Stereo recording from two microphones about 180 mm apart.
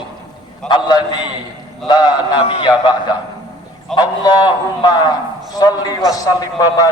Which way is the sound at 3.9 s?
25° left (ahead or behind).